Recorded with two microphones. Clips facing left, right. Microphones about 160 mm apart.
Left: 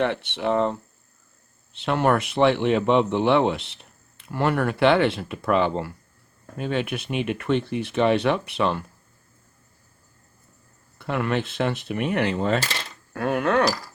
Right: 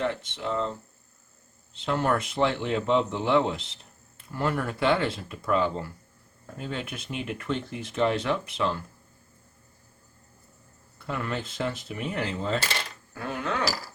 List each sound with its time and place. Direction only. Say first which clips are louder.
0.0 s speech: left 6 dB; 70° left (ahead or behind)
10.9 s speech: left 7 dB; 70° left (ahead or behind)